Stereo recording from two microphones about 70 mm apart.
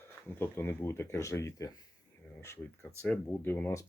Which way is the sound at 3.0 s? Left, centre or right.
Left.